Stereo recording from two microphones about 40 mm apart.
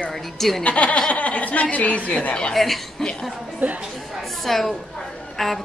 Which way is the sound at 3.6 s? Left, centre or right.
Right.